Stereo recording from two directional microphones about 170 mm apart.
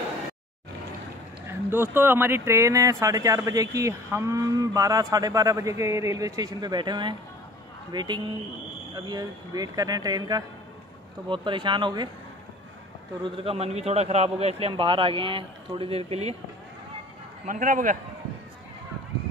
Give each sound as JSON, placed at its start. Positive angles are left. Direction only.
{"t": 1.7, "sound": "speech", "side_deg": -15}
{"t": 3.7, "sound": "cattle", "side_deg": -20}
{"t": 13.2, "sound": "a man's voice", "side_deg": -35}
{"t": 17.5, "sound": "a man's voice", "side_deg": -50}